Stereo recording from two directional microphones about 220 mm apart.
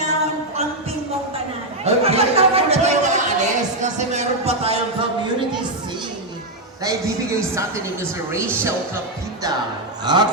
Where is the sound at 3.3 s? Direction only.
35° right (ahead or behind).